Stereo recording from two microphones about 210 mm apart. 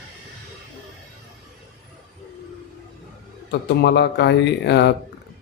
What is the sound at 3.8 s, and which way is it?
Speech, 50° left (ahead or behind).